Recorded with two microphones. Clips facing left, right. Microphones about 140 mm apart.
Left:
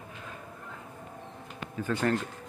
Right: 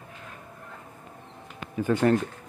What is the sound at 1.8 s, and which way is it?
Speech, 15° right (ahead or behind).